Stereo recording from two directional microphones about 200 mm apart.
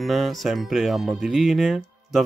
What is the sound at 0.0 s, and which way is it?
Speech, centre (ahead or behind).